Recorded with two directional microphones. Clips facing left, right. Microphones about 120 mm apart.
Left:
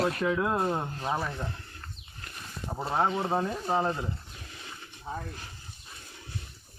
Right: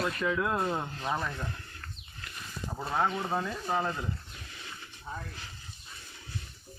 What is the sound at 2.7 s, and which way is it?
Speech, 25° left (ahead or behind).